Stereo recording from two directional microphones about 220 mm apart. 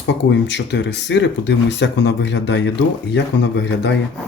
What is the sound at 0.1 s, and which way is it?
Speech, 55° left (ahead or behind).